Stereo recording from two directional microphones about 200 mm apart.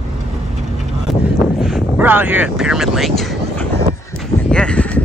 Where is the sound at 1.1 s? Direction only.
Centre (ahead or behind).